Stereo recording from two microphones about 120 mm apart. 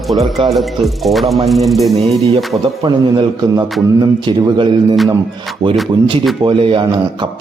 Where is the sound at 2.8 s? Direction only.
40° right (ahead or behind).